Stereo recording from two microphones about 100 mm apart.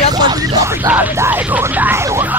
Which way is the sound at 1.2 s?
20° right (ahead or behind).